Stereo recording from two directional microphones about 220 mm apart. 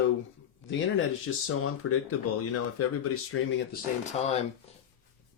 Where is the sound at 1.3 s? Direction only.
70° left (ahead or behind).